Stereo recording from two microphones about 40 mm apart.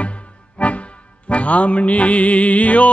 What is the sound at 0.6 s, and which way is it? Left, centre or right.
Music, left.